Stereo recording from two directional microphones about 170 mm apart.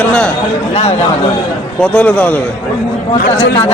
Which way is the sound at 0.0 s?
10° left (ahead or behind).